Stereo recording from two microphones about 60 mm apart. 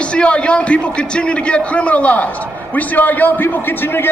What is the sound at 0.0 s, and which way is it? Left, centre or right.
A man's voice, centre.